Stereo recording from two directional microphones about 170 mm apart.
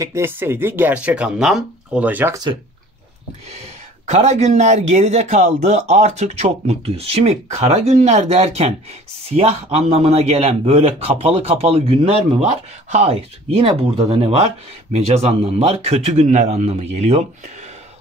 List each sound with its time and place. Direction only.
0.0 s speech: 15° right (ahead or behind)
4.1 s a man's voice: 40° right (ahead or behind)